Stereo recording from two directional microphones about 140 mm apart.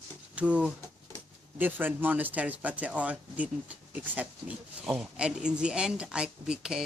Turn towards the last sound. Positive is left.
turn(degrees=-5)  # may be behind; listen again after turning